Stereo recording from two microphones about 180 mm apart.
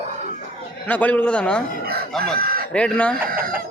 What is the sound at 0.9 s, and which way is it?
Speech, 10° left (ahead or behind).